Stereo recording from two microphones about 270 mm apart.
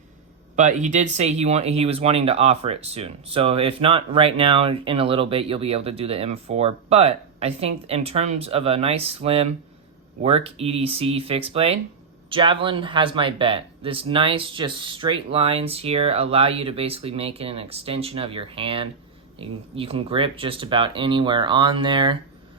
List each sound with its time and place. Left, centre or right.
0.5 s speech: right